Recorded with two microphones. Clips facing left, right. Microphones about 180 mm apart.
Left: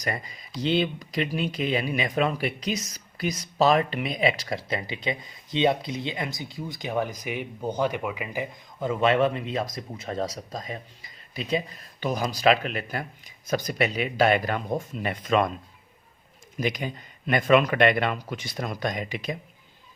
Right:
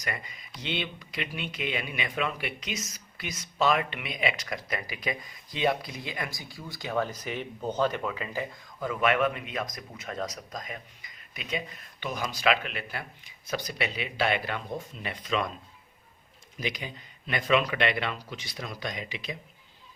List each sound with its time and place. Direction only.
0.0 s speech: 35° left (ahead or behind)
16.6 s speech: 50° left (ahead or behind)